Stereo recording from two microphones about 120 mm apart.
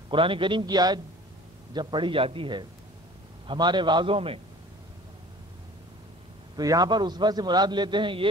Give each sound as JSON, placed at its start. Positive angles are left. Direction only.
{"t": 0.1, "sound": "a man's voice", "side_deg": -45}
{"t": 6.5, "sound": "a man's voice", "side_deg": -30}